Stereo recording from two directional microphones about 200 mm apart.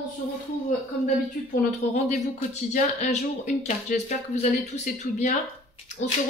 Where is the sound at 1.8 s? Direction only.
30° left (ahead or behind).